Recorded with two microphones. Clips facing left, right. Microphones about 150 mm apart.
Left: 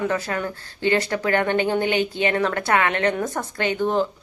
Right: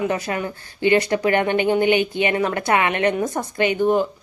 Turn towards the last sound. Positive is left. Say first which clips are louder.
# right 3 dB
turn(degrees=-15)  # may be behind; listen again after turning